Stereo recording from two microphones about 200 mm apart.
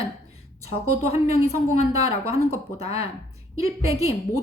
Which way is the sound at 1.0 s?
30° left (ahead or behind).